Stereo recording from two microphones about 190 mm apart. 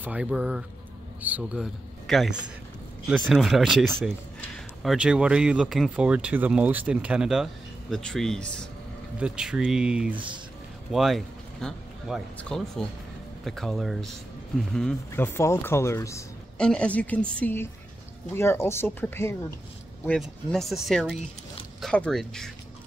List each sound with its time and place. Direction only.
0.0 s speech: 5° right (ahead or behind)
10.1 s speech: 25° right (ahead or behind)
10.9 s speech: centre (ahead or behind); by 16.3 s 15° left (ahead or behind)
16.5 s speech: 5° left (ahead or behind)
20.1 s speech: centre (ahead or behind)